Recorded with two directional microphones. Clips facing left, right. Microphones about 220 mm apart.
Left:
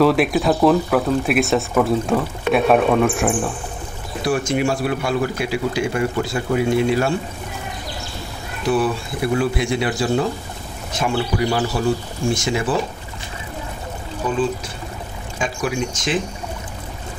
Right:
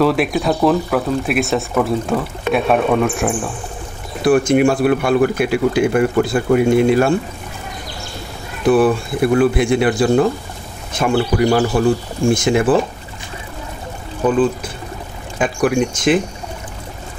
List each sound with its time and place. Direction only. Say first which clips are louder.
0.0 s speech: even; centre (ahead or behind)
4.2 s speech: right 7 dB; 55° right (ahead or behind)
8.6 s speech: right 6 dB; 55° right (ahead or behind)
15.3 s speech: right 7 dB; 55° right (ahead or behind)